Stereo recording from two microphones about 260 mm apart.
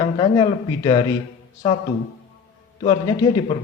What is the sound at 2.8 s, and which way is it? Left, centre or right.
Speech, centre.